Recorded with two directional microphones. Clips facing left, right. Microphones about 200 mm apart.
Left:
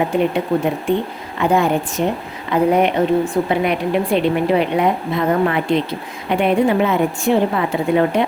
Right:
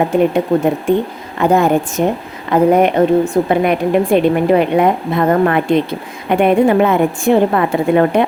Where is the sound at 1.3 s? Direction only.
45° right (ahead or behind).